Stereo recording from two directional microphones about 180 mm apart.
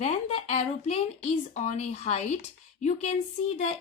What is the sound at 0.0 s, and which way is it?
A woman's voice, 35° left (ahead or behind).